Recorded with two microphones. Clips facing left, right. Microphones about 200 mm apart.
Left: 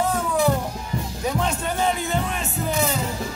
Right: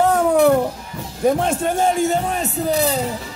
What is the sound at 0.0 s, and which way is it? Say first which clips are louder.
Music: right 7 dB; 65° right (ahead or behind).